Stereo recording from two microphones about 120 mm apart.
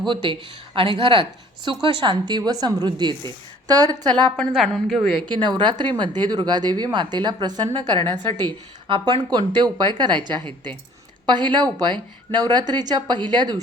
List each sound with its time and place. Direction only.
0.1 s speech: 45° right (ahead or behind)
4.4 s a woman's voice: 5° left (ahead or behind)
5.3 s speech: 40° right (ahead or behind)